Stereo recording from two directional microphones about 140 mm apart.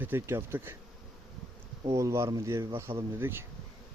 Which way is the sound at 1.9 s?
20° right (ahead or behind).